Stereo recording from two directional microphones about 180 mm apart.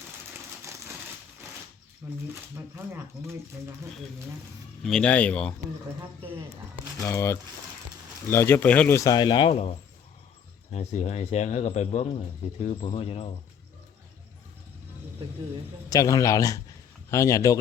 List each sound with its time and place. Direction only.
2.3 s speech: 10° right (ahead or behind)
4.8 s speech: 5° left (ahead or behind)
7.0 s speech: 15° left (ahead or behind); by 13.3 s 30° left (ahead or behind)
15.9 s a man's voice: 20° left (ahead or behind)